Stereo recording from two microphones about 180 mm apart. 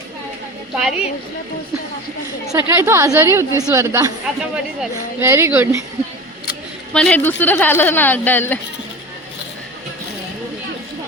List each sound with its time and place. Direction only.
0.8 s a woman's voice: 5° right (ahead or behind)
2.5 s a woman's voice: 15° right (ahead or behind)
6.9 s speech: 5° left (ahead or behind)